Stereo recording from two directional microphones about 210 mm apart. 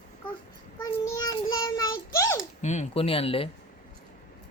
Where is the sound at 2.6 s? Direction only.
35° left (ahead or behind).